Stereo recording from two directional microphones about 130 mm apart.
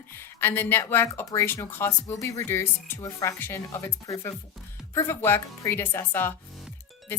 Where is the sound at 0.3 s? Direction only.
15° left (ahead or behind).